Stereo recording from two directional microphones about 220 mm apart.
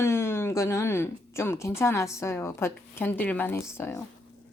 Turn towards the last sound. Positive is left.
turn(degrees=10)  # may be behind; listen again after turning